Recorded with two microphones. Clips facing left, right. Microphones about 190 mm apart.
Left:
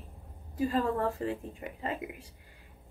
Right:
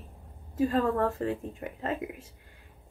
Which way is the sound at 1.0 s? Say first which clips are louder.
Right 3 dB; 60° right (ahead or behind).